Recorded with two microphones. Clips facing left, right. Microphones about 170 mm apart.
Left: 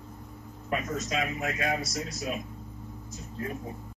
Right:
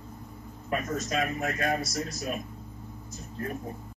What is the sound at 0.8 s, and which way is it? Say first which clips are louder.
Speech: right 1 dB; 50° right (ahead or behind).